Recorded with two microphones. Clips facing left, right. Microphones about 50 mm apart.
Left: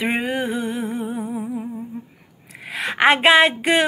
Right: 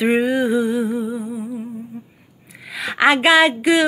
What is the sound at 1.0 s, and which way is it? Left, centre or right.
Humming, left.